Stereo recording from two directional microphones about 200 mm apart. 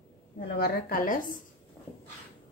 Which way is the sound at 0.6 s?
50° left (ahead or behind).